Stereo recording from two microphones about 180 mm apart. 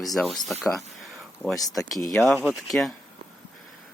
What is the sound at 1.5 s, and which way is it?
Speech, 20° left (ahead or behind).